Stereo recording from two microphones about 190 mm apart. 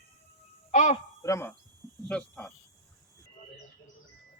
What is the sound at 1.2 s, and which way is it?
Speech, 15° left (ahead or behind).